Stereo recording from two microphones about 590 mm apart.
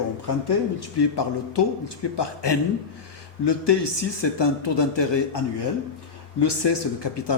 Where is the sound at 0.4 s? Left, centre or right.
Left.